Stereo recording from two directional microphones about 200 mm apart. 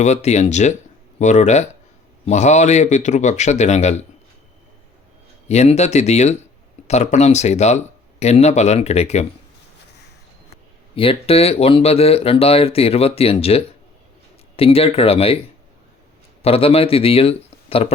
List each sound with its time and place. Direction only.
0.0 s speech: 35° left (ahead or behind)
5.5 s speech: 35° left (ahead or behind)
10.5 s speech: 25° left (ahead or behind)
16.4 s a man's voice: 30° left (ahead or behind)